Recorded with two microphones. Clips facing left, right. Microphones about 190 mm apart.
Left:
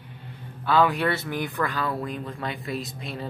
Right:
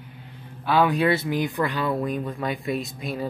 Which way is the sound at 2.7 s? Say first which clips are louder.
Right 4 dB; 35° left (ahead or behind).